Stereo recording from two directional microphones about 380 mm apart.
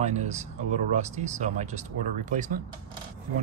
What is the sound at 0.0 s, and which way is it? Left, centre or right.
Speech, centre.